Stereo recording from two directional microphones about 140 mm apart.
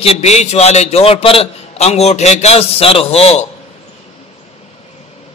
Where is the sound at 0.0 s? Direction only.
45° left (ahead or behind).